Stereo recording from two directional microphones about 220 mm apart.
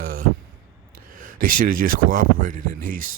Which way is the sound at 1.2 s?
40° right (ahead or behind).